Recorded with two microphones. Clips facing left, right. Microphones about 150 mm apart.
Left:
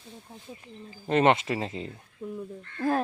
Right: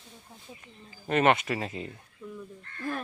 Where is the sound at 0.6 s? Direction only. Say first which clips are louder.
Left 5 dB; 25° left (ahead or behind).